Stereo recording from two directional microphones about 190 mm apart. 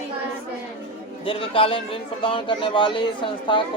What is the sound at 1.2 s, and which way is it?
Speech, 30° left (ahead or behind).